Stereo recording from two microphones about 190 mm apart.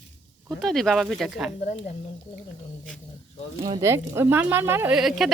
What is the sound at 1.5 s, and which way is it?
Speech, 35° left (ahead or behind).